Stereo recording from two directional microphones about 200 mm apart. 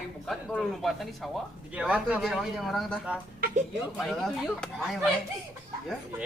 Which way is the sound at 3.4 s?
45° right (ahead or behind).